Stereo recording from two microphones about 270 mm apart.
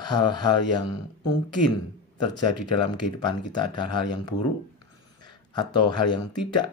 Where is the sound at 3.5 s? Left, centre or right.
Centre.